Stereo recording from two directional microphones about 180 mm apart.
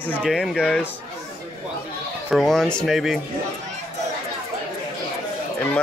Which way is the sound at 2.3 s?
Centre (ahead or behind).